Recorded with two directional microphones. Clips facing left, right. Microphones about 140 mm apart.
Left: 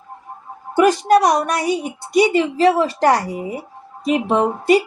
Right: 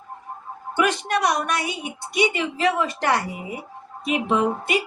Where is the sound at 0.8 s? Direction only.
40° left (ahead or behind).